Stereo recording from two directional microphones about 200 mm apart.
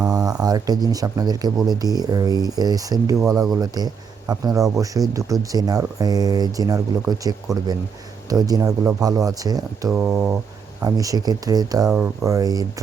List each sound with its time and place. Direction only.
0.1 s a sound: 20° right (ahead or behind)
0.4 s speech: 20° right (ahead or behind)
9.9 s speech: 10° right (ahead or behind)